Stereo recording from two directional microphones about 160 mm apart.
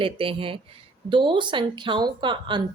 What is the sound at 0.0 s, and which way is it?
A woman's voice, 35° right (ahead or behind).